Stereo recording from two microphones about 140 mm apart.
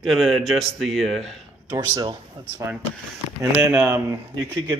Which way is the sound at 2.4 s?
35° right (ahead or behind).